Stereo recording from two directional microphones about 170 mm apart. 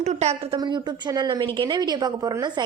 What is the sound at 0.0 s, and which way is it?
Speech, 40° right (ahead or behind).